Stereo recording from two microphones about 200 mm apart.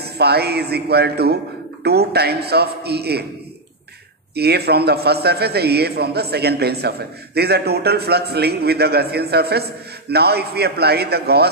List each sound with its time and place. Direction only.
0.0 s a man's voice: 55° right (ahead or behind)
4.4 s a man's voice: 55° right (ahead or behind)